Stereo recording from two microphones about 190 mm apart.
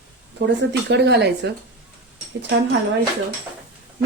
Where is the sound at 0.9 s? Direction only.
60° right (ahead or behind).